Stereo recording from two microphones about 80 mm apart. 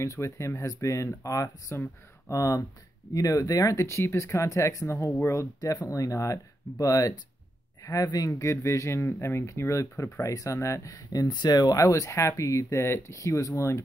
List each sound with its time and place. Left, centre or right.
0.0 s speech: left
8.3 s speech: left
11.2 s speech: left